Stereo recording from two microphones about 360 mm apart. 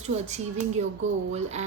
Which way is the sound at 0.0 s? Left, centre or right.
Centre.